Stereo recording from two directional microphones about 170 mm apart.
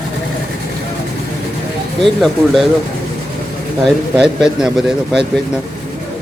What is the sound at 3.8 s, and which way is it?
A man's voice, centre (ahead or behind).